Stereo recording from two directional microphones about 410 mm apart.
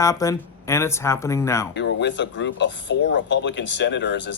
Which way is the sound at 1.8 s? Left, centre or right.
Left.